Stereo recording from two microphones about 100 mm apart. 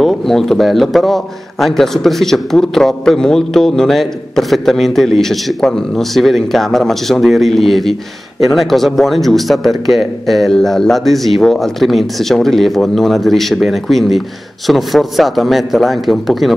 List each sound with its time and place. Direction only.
0.0 s a man's voice: centre (ahead or behind)